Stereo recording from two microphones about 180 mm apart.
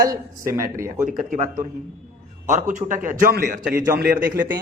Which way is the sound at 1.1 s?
45° right (ahead or behind).